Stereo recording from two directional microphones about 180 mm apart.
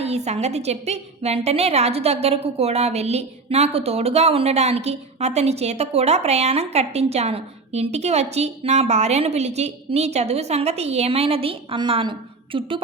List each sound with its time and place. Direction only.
0.0 s a woman's voice: 35° right (ahead or behind)